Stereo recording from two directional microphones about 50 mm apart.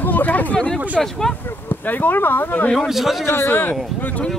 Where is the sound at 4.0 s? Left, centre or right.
Left.